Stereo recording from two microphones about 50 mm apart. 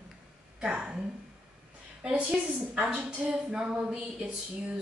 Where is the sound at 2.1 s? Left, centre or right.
Right.